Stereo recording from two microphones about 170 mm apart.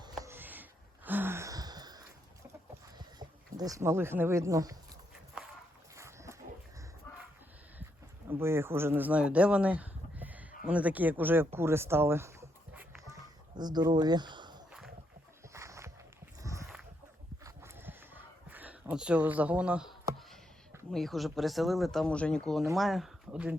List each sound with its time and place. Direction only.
0.2 s gasp: 15° right (ahead or behind)
3.0 s speech: 25° right (ahead or behind)
5.4 s walk: 5° right (ahead or behind)
6.0 s dog: 15° right (ahead or behind)
8.3 s speech: 15° right (ahead or behind)
13.6 s speech: 25° right (ahead or behind)
15.5 s a sound: 15° right (ahead or behind); by 20.4 s centre (ahead or behind)
20.9 s speech: centre (ahead or behind)